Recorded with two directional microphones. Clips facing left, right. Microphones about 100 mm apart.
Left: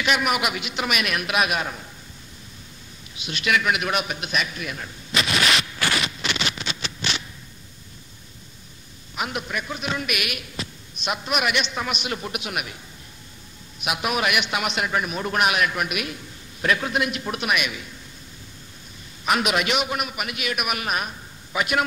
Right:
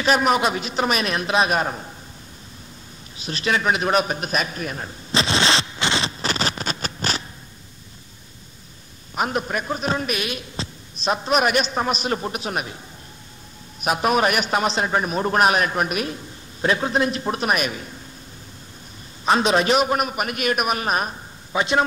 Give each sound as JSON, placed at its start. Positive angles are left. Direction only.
{"t": 0.0, "sound": "a man's voice", "side_deg": -35}
{"t": 3.2, "sound": "a sound", "side_deg": -35}
{"t": 9.1, "sound": "a man's voice", "side_deg": -40}
{"t": 13.7, "sound": "a man's voice", "side_deg": -40}
{"t": 19.2, "sound": "a man's voice", "side_deg": -30}